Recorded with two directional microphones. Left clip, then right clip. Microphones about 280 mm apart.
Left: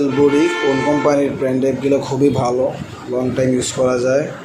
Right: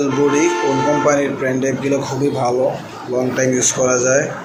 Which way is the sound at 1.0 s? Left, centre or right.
Left.